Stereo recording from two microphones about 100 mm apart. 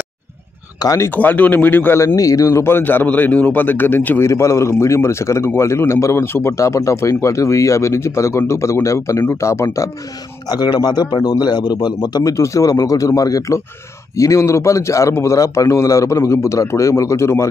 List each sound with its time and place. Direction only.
0.8 s a man's voice: 30° left (ahead or behind)
1.1 s a man's voice: 15° left (ahead or behind)
2.1 s a man's voice: 35° left (ahead or behind)
10.5 s a man's voice: 45° left (ahead or behind)